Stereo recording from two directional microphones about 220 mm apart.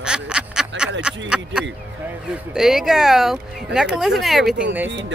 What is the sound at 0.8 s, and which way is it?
Speech, 5° right (ahead or behind).